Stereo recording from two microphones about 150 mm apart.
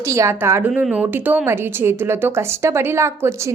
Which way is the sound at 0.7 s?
5° right (ahead or behind).